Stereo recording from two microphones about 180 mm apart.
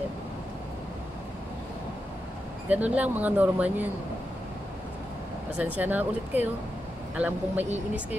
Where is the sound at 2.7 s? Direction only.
10° right (ahead or behind).